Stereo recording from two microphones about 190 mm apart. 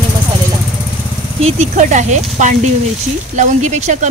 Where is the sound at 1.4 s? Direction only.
35° right (ahead or behind).